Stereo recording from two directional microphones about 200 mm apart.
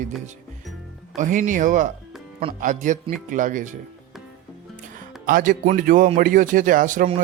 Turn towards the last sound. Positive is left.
turn(degrees=-40)  # may be behind; listen again after turning